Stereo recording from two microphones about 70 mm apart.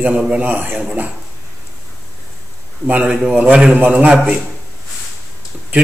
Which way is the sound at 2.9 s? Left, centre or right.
Right.